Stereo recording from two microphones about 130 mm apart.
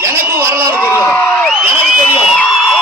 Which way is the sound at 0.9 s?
15° left (ahead or behind).